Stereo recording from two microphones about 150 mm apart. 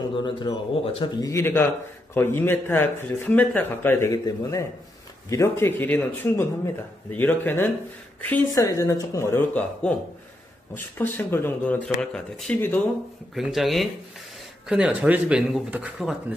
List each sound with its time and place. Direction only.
0.1 s speech: 30° left (ahead or behind)
1.3 s speech: 15° left (ahead or behind)
8.5 s speech: 25° left (ahead or behind)
11.0 s speech: 15° left (ahead or behind)
13.3 s speech: centre (ahead or behind)